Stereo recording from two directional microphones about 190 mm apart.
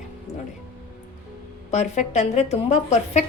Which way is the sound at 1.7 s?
35° left (ahead or behind).